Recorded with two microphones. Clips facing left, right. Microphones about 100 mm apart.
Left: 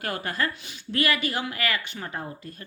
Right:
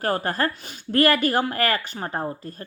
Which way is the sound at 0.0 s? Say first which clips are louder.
Right 5 dB; 40° right (ahead or behind).